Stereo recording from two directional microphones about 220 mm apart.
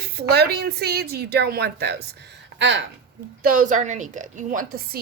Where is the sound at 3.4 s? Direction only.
40° right (ahead or behind).